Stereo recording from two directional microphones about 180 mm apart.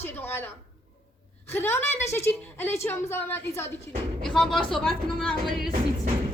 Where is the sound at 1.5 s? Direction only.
10° left (ahead or behind).